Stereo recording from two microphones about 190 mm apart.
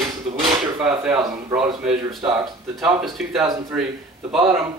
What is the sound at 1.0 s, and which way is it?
Speech, 15° right (ahead or behind).